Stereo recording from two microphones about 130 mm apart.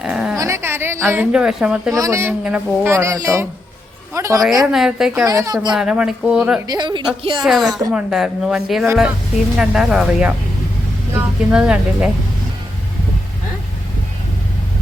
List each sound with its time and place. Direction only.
0.0 s dog: 5° right (ahead or behind)
0.3 s a sound: 20° right (ahead or behind)
1.3 s a woman's voice: 5° right (ahead or behind)
1.9 s speech: 25° right (ahead or behind)
2.4 s a woman's voice: 10° right (ahead or behind)
2.9 s a woman's voice: 20° right (ahead or behind)
4.4 s speech: centre (ahead or behind)
5.2 s speech: 25° right (ahead or behind)
5.7 s a woman's voice: 5° right (ahead or behind)
6.7 s a woman's voice: 35° right (ahead or behind)
7.4 s a woman's voice: 5° right (ahead or behind)